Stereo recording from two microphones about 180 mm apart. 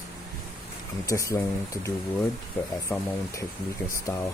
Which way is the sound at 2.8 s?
15° left (ahead or behind).